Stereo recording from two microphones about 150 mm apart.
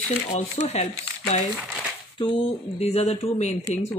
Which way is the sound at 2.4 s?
45° left (ahead or behind).